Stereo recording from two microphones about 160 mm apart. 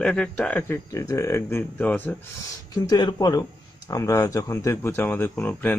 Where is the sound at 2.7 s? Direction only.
25° left (ahead or behind).